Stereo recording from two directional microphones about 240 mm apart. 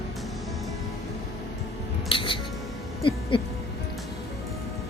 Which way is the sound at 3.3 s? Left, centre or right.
Left.